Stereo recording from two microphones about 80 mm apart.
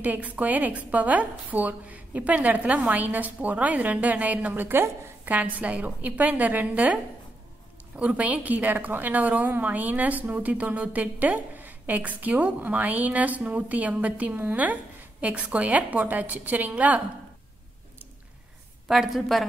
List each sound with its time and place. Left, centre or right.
0.0 s a woman's voice: right
8.0 s a woman's voice: centre
18.9 s a woman's voice: centre